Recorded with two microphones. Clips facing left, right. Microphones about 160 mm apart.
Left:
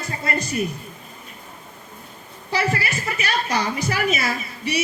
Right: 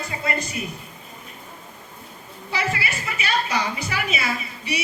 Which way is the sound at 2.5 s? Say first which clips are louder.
Left 3 dB; 40° left (ahead or behind).